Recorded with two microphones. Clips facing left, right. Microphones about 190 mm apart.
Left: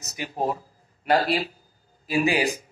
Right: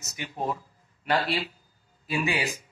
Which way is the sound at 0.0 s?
35° left (ahead or behind).